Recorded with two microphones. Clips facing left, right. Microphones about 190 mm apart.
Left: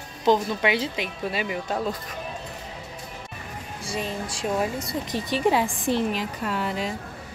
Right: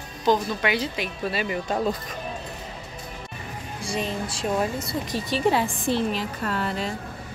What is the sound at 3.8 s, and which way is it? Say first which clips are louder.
Speech: right 2 dB; 5° left (ahead or behind).